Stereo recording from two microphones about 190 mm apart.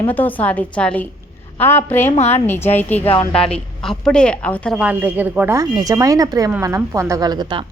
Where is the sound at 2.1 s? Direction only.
35° left (ahead or behind).